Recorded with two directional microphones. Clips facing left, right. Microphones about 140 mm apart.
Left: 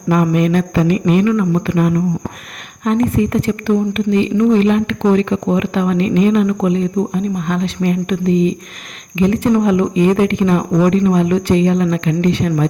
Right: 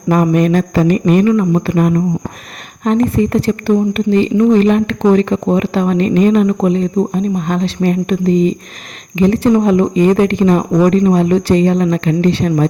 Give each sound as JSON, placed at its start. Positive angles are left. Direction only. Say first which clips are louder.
{"t": 0.1, "sound": "speech", "louder": "right 2 dB", "side_deg": -40}
{"t": 1.3, "sound": "speech", "louder": "right 3 dB", "side_deg": -35}
{"t": 2.8, "sound": "speech", "louder": "right 2 dB", "side_deg": -35}